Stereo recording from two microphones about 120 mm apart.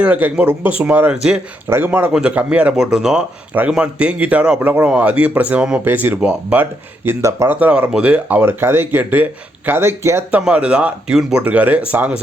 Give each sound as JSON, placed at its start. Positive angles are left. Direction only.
{"t": 0.0, "sound": "speech", "side_deg": -15}
{"t": 10.4, "sound": "speech", "side_deg": -10}